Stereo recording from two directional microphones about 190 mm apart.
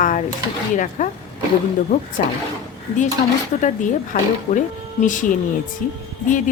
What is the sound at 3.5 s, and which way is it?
Speech, 40° left (ahead or behind).